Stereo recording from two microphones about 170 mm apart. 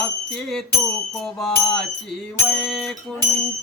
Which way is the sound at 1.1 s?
Centre (ahead or behind).